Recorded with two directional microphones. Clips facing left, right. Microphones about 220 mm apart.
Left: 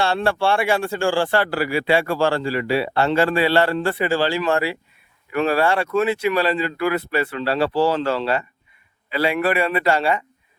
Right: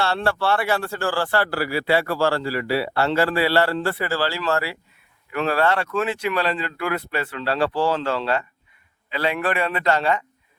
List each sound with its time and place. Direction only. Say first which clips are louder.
0.0 s speech: left 3 dB; 15° left (ahead or behind)